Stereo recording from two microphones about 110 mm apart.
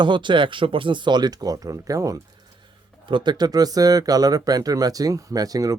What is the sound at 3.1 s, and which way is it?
Speech, 45° right (ahead or behind).